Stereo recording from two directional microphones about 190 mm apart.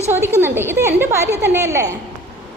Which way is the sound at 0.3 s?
10° right (ahead or behind).